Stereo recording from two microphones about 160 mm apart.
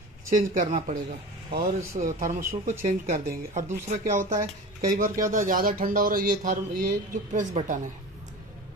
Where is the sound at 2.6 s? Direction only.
50° right (ahead or behind).